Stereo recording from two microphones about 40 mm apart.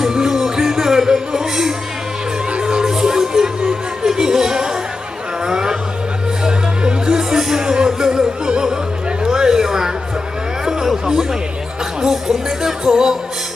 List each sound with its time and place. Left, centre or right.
0.0 s music: centre
2.5 s music: right
5.5 s a sound: centre
6.4 s music: centre
9.2 s a sound: centre
10.7 s chatter: centre
12.0 s music: centre